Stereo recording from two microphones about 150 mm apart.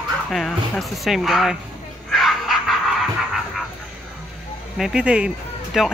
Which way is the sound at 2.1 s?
Centre (ahead or behind).